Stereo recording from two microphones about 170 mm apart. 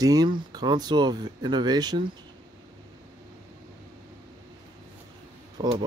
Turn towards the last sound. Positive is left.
turn(degrees=-30)  # may be behind; listen again after turning